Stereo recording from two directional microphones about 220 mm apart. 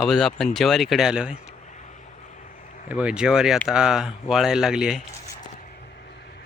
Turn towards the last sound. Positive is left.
turn(degrees=0)  # may be behind; listen again after turning